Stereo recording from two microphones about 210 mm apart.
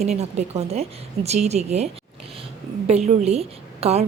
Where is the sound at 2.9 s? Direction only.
30° right (ahead or behind).